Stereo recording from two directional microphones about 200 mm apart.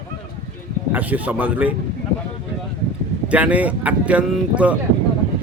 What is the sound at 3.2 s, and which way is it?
Speech, 5° right (ahead or behind).